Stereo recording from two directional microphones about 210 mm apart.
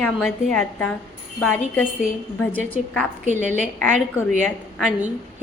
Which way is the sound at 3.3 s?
35° right (ahead or behind).